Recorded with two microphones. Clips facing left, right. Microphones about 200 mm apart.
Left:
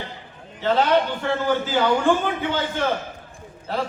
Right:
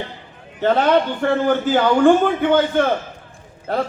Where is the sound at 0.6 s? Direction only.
55° right (ahead or behind).